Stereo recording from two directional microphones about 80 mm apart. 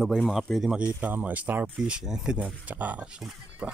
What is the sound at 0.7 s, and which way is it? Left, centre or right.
Speech, centre.